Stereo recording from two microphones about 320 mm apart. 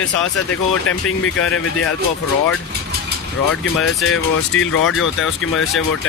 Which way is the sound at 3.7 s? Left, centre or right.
Left.